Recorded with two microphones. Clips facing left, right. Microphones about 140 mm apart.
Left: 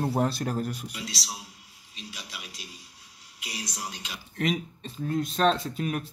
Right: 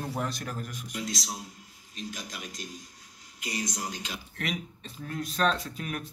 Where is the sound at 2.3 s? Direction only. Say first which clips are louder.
Right 4 dB; 5° left (ahead or behind).